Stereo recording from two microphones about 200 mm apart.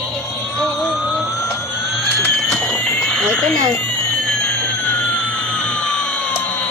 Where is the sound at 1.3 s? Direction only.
15° left (ahead or behind).